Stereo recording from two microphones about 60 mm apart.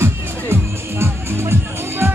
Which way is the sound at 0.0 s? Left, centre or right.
Right.